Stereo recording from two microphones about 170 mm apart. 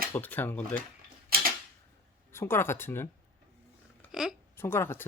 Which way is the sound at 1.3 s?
60° right (ahead or behind).